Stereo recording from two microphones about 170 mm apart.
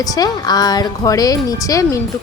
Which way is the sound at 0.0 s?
20° left (ahead or behind).